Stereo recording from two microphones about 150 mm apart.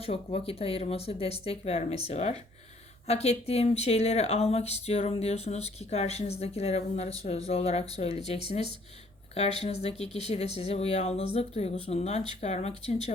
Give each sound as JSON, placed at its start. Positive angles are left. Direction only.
{"t": 0.0, "sound": "speech", "side_deg": 40}